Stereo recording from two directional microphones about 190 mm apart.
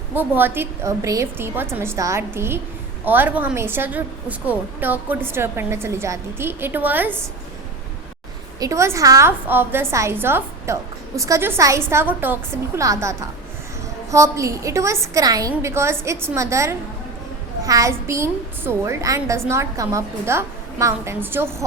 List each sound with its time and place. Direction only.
0.1 s a woman's voice: 10° right (ahead or behind)
8.5 s a woman's voice: 15° right (ahead or behind)